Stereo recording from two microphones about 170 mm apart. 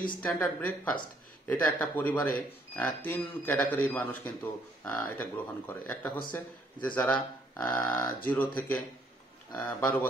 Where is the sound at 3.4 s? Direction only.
10° left (ahead or behind).